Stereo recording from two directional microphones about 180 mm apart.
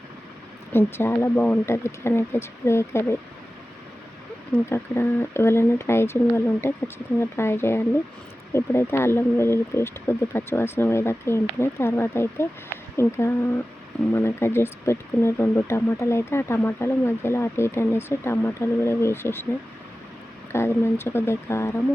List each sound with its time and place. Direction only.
0.7 s speech: 10° left (ahead or behind)
4.5 s speech: 15° left (ahead or behind)
20.5 s speech: 15° left (ahead or behind)